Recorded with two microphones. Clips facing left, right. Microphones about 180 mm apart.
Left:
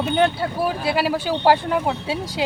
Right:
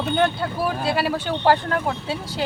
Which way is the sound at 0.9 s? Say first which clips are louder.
Left 3 dB; 5° left (ahead or behind).